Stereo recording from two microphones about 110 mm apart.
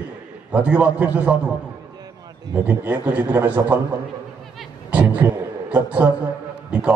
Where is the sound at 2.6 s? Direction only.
15° right (ahead or behind).